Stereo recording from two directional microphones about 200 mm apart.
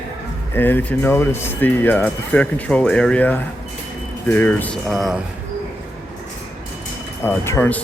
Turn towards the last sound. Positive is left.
turn(degrees=10)  # may be behind; listen again after turning